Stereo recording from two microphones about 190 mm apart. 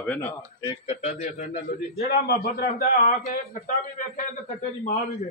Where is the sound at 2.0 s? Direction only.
55° left (ahead or behind).